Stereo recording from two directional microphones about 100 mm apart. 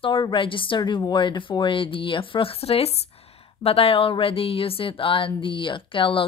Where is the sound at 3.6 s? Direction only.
75° left (ahead or behind).